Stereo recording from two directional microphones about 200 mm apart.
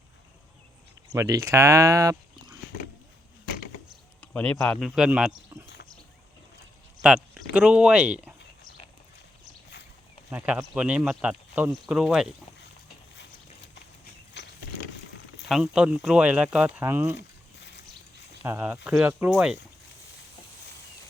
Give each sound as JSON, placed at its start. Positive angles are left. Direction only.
{"t": 1.1, "sound": "speech", "side_deg": -15}
{"t": 4.2, "sound": "speech", "side_deg": 5}
{"t": 5.6, "sound": "a sound", "side_deg": 60}
{"t": 7.5, "sound": "speech", "side_deg": -5}
{"t": 10.3, "sound": "speech", "side_deg": -5}
{"t": 14.4, "sound": "a sound", "side_deg": 60}
{"t": 15.4, "sound": "speech", "side_deg": 0}
{"t": 17.2, "sound": "a sound", "side_deg": 60}
{"t": 18.4, "sound": "speech", "side_deg": -10}